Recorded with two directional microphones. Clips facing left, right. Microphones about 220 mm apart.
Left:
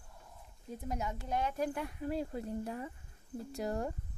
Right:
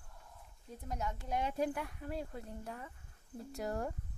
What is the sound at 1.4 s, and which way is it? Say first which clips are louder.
Speech: right 1 dB; 25° right (ahead or behind).